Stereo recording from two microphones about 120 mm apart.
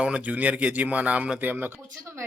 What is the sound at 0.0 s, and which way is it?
Speech, 10° right (ahead or behind).